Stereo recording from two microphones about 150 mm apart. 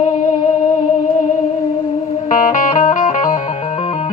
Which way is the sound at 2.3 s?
60° left (ahead or behind).